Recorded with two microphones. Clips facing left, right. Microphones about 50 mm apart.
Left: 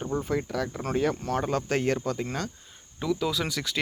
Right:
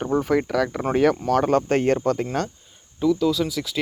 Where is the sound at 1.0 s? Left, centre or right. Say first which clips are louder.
Right 8 dB; right.